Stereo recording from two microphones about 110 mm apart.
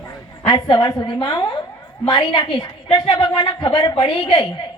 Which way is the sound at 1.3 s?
35° left (ahead or behind).